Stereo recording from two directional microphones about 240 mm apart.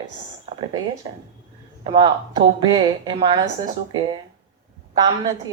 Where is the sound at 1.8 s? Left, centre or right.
Centre.